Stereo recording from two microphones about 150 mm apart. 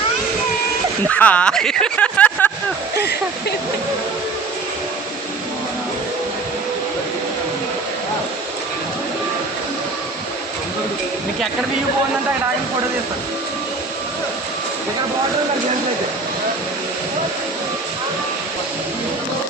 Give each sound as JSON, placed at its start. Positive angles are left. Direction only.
{"t": 1.0, "sound": "speech", "side_deg": 10}
{"t": 2.9, "sound": "speech", "side_deg": 90}